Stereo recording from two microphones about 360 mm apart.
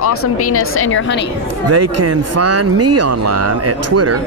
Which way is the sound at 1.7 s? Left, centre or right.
Right.